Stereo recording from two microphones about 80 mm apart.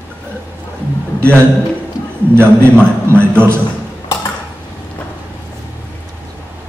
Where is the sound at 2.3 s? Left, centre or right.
Right.